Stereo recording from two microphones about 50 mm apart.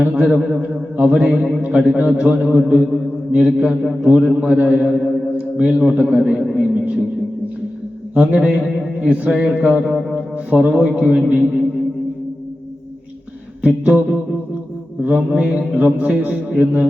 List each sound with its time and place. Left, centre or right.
0.0 s mantra: right
3.4 s mantra: right
4.8 s a sound: centre
5.3 s a sound: right
5.9 s mantra: right
8.1 s a man's voice: right
9.0 s a sound: right
9.5 s mantra: right
10.2 s a man's voice: right
13.6 s mantra: right